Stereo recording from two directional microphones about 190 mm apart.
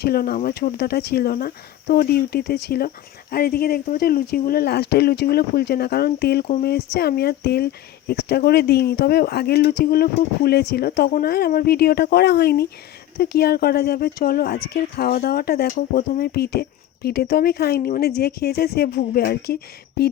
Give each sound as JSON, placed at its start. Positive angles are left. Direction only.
{"t": 0.0, "sound": "speech", "side_deg": 55}